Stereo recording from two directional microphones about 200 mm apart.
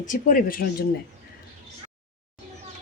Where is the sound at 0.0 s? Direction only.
40° left (ahead or behind).